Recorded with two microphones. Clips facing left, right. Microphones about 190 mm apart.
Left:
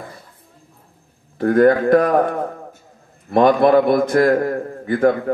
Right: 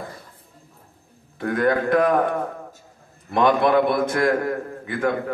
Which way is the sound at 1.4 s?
40° left (ahead or behind).